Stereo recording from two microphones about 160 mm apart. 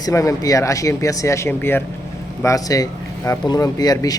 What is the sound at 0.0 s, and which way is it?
Speech, 20° left (ahead or behind).